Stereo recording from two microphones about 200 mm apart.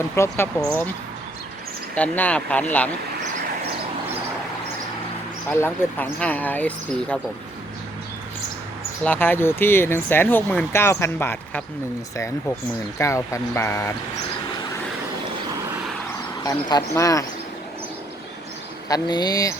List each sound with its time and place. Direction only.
0.2 s speech: 10° left (ahead or behind)
2.0 s speech: 5° left (ahead or behind)
5.5 s speech: 10° left (ahead or behind)
9.0 s speech: 10° left (ahead or behind)
13.0 s speech: 15° left (ahead or behind)
16.4 s speech: 20° left (ahead or behind)
18.9 s speech: 20° left (ahead or behind)